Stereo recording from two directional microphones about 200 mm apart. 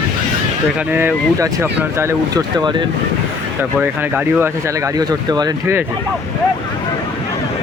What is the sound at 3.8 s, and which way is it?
Speech, 10° right (ahead or behind).